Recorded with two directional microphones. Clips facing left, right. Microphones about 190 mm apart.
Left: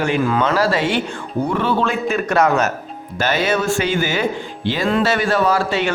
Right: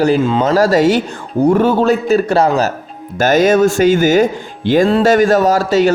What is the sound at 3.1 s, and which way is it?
A man's voice, 45° right (ahead or behind).